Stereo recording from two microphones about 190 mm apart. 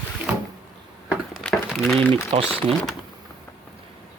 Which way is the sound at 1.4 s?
5° left (ahead or behind).